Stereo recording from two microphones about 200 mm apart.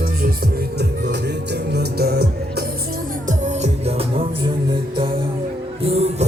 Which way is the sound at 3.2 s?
35° right (ahead or behind).